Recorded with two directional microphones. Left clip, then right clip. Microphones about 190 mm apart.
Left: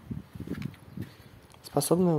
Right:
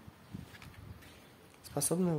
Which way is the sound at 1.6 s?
20° left (ahead or behind).